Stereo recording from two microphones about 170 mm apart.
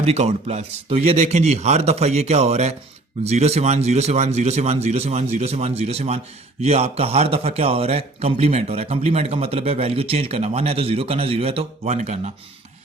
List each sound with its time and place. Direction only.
0.0 s a man's voice: 40° right (ahead or behind)